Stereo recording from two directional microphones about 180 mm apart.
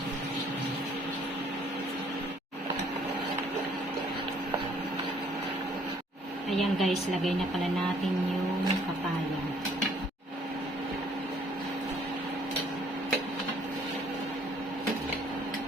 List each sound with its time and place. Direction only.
6.6 s a woman's voice: centre (ahead or behind)